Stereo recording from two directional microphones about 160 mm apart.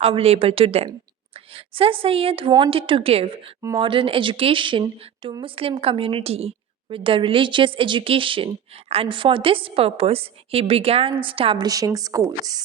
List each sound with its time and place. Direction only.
0.0 s a woman's voice: 40° right (ahead or behind)